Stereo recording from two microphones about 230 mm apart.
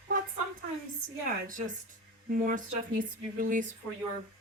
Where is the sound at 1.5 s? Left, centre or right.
Right.